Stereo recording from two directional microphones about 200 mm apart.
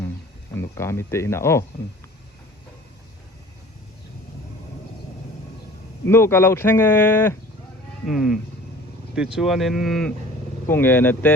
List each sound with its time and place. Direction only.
0.5 s speech: 15° left (ahead or behind)
6.1 s speech: 10° left (ahead or behind)